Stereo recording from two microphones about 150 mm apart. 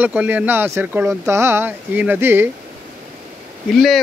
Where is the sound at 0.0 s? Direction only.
10° right (ahead or behind).